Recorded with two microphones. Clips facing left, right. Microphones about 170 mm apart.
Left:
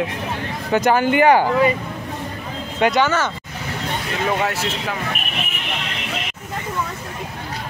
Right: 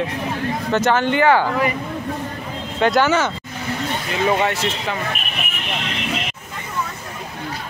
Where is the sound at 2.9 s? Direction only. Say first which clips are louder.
Right 2 dB; 10° right (ahead or behind).